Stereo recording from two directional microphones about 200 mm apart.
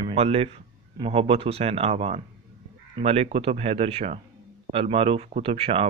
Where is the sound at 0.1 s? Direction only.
30° right (ahead or behind).